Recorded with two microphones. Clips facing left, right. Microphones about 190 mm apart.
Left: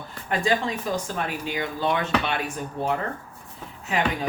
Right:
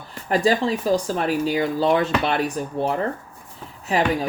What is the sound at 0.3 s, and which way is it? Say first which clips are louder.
Speech: right 5 dB; 35° right (ahead or behind).